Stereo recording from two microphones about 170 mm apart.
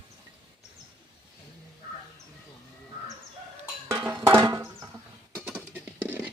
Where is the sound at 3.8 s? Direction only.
15° right (ahead or behind).